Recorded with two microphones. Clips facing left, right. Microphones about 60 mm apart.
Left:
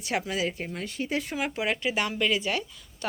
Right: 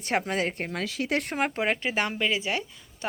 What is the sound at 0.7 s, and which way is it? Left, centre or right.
Speech, right.